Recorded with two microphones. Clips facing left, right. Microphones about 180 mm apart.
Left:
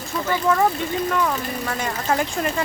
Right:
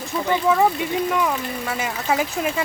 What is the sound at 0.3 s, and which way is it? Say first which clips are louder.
Speech: right 1 dB; 10° right (ahead or behind).